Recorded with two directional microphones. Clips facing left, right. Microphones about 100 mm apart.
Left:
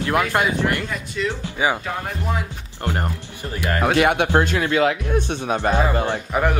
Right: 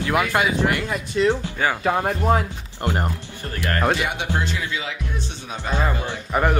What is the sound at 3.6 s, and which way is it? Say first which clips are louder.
Speech: left 1 dB; 10° left (ahead or behind).